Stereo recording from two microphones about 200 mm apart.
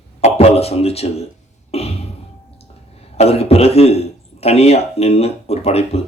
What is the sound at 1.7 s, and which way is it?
Music, 30° left (ahead or behind).